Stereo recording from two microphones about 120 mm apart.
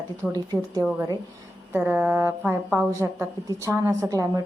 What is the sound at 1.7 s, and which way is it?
A woman's voice, 15° right (ahead or behind).